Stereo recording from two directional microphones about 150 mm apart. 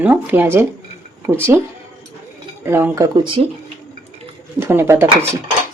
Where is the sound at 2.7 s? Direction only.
15° right (ahead or behind).